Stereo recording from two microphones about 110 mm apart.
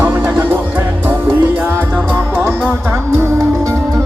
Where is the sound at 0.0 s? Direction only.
20° right (ahead or behind).